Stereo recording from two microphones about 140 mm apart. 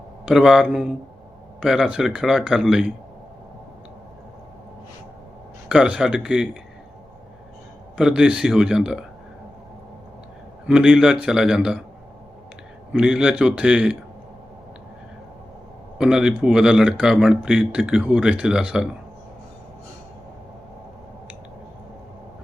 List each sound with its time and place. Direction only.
0.3 s speech: 5° right (ahead or behind)
5.6 s speech: 5° right (ahead or behind)
7.9 s speech: 5° right (ahead or behind)
10.7 s speech: 5° right (ahead or behind)
12.9 s a man's voice: 5° right (ahead or behind)
16.0 s speech: 5° right (ahead or behind)